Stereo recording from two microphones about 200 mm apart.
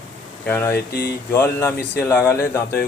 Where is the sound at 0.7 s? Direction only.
50° left (ahead or behind).